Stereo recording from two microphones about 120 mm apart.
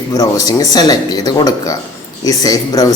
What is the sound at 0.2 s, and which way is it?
Speech, 30° left (ahead or behind).